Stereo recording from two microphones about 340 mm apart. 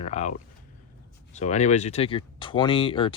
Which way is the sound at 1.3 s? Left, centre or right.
Centre.